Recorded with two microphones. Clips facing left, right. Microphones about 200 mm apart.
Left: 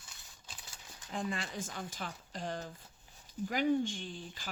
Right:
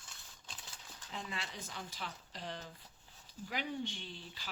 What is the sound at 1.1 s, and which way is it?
Speech, 50° left (ahead or behind).